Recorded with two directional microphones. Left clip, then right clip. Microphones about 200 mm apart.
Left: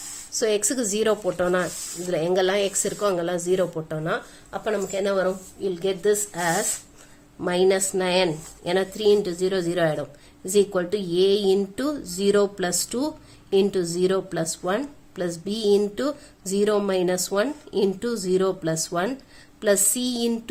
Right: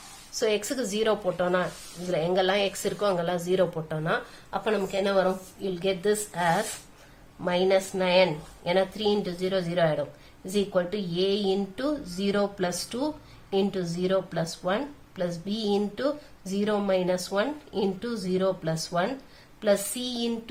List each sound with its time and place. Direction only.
0.3 s speech: 40° left (ahead or behind)